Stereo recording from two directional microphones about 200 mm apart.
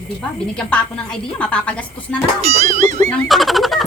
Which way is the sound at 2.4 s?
35° right (ahead or behind).